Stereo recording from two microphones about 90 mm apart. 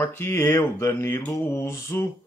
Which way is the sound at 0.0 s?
30° left (ahead or behind).